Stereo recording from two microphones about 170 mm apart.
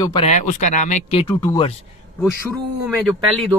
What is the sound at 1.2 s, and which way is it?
Speech, 15° left (ahead or behind).